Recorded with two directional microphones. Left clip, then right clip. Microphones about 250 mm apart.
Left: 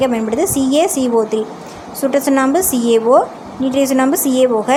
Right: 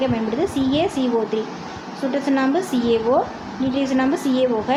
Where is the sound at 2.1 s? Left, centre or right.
Left.